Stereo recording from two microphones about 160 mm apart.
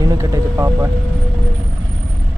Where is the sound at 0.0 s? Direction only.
20° right (ahead or behind).